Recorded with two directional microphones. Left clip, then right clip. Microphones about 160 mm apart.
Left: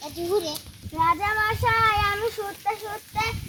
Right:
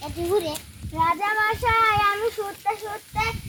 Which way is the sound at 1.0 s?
65° right (ahead or behind).